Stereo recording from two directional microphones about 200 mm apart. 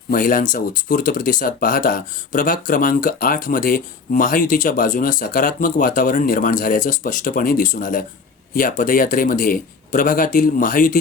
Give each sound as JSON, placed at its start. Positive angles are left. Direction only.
{"t": 0.1, "sound": "speech", "side_deg": 45}